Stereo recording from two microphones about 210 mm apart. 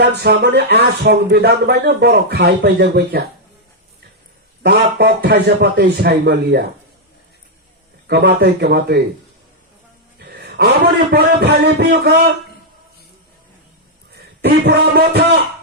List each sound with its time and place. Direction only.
0.0 s speech: 50° right (ahead or behind)
4.6 s speech: 50° right (ahead or behind)
8.0 s speech: 50° right (ahead or behind)
10.2 s a man's voice: 50° right (ahead or behind)
14.4 s speech: 50° right (ahead or behind)